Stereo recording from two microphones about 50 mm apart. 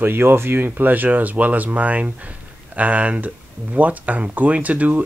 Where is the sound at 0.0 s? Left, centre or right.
Right.